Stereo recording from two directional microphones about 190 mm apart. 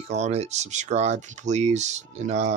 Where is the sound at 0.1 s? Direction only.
35° right (ahead or behind).